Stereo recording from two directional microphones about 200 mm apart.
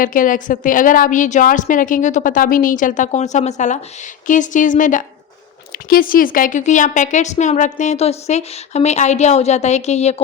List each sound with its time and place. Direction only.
0.0 s a woman's voice: 45° left (ahead or behind)